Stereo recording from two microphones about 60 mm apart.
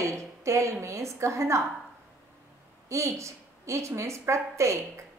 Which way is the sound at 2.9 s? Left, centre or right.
Right.